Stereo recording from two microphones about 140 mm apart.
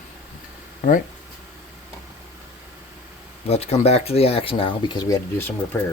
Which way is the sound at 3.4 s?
50° left (ahead or behind).